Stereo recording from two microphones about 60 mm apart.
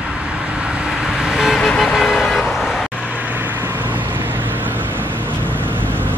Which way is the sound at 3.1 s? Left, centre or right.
Right.